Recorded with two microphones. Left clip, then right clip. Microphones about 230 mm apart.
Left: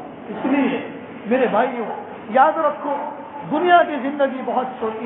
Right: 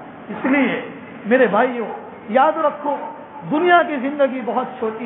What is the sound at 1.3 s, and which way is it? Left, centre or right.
A woman's voice, right.